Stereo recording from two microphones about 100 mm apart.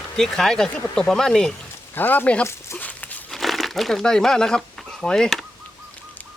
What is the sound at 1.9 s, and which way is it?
Speech, 20° left (ahead or behind).